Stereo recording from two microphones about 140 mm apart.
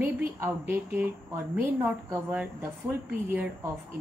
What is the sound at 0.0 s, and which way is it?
A woman's voice, 15° right (ahead or behind).